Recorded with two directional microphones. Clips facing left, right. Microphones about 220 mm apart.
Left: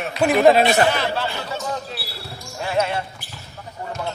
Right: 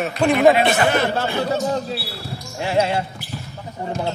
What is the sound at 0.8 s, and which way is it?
Speech, 50° right (ahead or behind).